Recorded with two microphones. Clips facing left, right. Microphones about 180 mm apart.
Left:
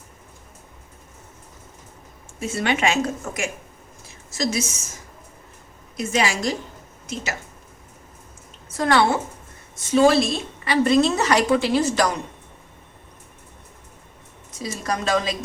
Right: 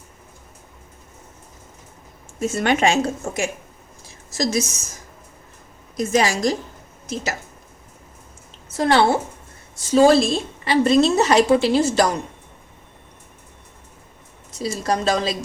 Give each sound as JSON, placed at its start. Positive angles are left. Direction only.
{"t": 2.4, "sound": "a woman's voice", "side_deg": -45}
{"t": 6.0, "sound": "speech", "side_deg": -40}
{"t": 8.7, "sound": "a woman's voice", "side_deg": -30}
{"t": 14.6, "sound": "speech", "side_deg": -35}